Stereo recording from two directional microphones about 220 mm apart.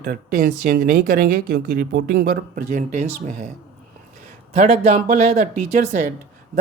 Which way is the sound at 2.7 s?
35° right (ahead or behind).